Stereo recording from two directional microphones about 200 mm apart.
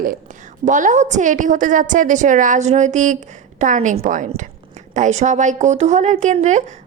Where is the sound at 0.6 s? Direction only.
40° right (ahead or behind).